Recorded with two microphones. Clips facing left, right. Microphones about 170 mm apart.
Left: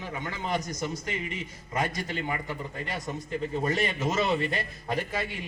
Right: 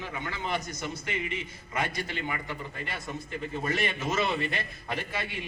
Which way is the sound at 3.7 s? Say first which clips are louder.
Even; 40° left (ahead or behind).